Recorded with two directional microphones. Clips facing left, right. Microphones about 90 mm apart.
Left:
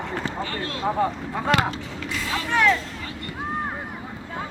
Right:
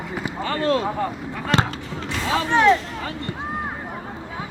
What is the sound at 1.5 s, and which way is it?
Speech, 30° right (ahead or behind).